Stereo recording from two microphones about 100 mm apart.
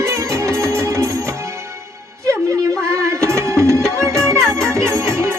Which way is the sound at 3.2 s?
30° right (ahead or behind).